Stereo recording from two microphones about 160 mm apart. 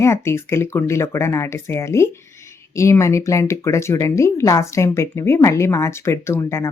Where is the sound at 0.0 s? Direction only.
15° left (ahead or behind).